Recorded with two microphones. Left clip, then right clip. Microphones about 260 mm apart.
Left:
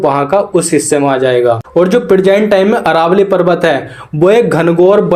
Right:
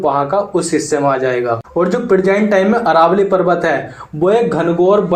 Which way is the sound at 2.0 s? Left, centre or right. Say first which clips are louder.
Left 5 dB; left.